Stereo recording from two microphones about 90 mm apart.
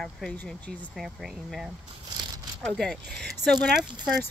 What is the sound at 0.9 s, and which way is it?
Speech, 5° right (ahead or behind).